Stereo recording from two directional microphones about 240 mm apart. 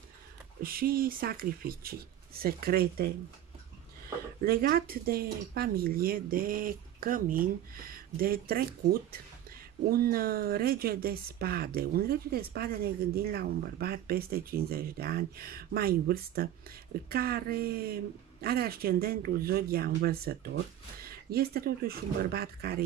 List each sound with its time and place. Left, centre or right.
0.6 s speech: right
4.5 s speech: right
9.8 s speech: right